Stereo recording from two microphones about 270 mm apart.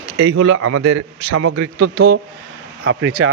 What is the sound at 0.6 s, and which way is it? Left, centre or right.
A man's voice, right.